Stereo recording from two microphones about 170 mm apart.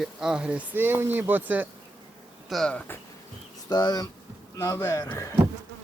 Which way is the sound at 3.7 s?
25° left (ahead or behind).